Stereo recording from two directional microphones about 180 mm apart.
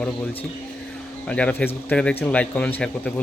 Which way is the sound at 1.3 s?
5° left (ahead or behind).